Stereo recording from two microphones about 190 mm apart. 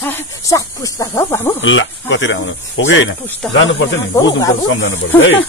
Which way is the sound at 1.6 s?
80° left.